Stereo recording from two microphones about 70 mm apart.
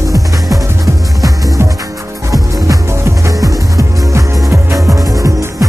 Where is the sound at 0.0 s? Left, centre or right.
Right.